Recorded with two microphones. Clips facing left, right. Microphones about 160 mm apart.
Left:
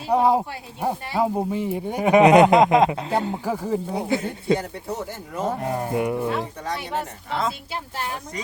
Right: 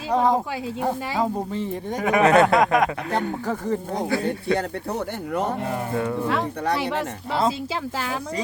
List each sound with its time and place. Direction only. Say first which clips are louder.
0.1 s speech: left 2 dB; 10° left (ahead or behind)
3.1 s speech: left 1 dB; 10° left (ahead or behind)
4.5 s speech: right 1 dB; 65° right (ahead or behind)
5.6 s speech: left 2 dB; 20° left (ahead or behind)
6.2 s speech: right 3 dB; 90° right
7.3 s a woman's voice: right 4 dB; 35° right (ahead or behind)